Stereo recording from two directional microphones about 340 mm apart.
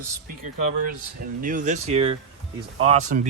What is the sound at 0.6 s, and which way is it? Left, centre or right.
A man's voice, right.